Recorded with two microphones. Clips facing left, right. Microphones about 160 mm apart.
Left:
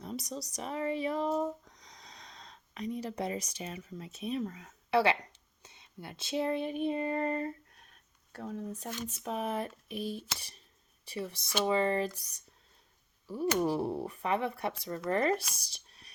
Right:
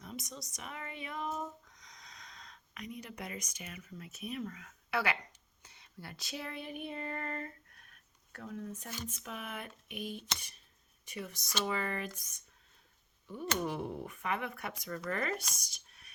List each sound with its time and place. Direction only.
0.0 s speech: 35° left (ahead or behind)
5.6 s female singing: 20° left (ahead or behind)
8.3 s speech: 35° left (ahead or behind)
15.5 s a sound: 30° left (ahead or behind)